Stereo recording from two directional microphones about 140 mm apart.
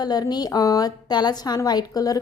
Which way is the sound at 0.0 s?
30° left (ahead or behind).